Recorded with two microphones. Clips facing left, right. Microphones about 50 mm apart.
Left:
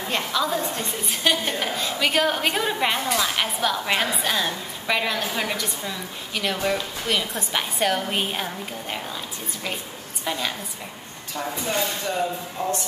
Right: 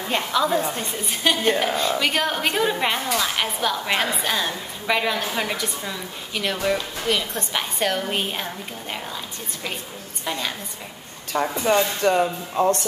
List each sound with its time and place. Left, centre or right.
0.1 s a woman's voice: centre
11.3 s speech: right